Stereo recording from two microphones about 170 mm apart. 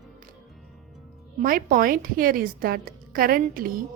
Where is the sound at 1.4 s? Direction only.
55° right (ahead or behind).